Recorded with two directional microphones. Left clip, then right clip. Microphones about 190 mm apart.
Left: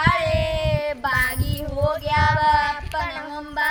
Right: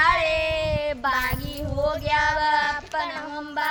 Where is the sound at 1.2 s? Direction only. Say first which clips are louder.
Left 3 dB; 10° left (ahead or behind).